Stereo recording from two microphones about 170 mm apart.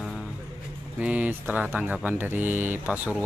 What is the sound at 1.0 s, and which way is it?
Speech, 10° right (ahead or behind).